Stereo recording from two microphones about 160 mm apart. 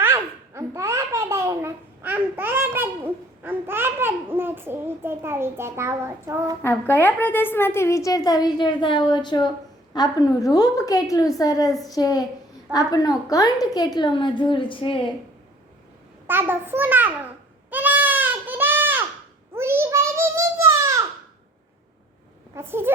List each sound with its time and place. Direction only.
0.0 s baby laughter: 15° right (ahead or behind)
6.6 s a woman's voice: 15° left (ahead or behind); by 15.1 s 30° left (ahead or behind)
16.2 s a child's voice: 15° right (ahead or behind)
17.7 s goat: 10° right (ahead or behind)
19.5 s a sound: 15° right (ahead or behind)
22.5 s a woman's voice: 15° right (ahead or behind)